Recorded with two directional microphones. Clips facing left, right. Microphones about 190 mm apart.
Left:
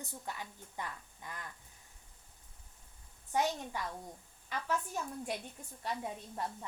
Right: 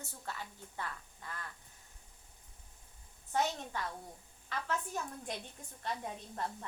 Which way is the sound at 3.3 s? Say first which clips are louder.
Left 1 dB; 10° left (ahead or behind).